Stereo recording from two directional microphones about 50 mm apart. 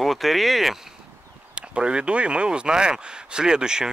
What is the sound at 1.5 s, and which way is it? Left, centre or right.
Speech, right.